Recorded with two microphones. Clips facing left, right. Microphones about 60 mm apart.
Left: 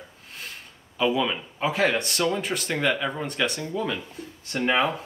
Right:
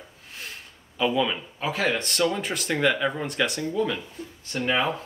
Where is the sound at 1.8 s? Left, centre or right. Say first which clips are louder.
Even; centre.